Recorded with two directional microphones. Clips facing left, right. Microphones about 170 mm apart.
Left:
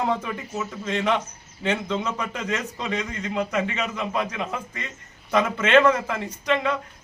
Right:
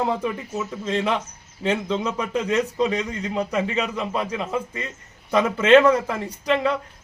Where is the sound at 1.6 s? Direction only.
35° right (ahead or behind).